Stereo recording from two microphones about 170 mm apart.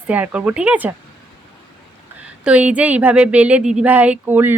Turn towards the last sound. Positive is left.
turn(degrees=-10)  # may be behind; listen again after turning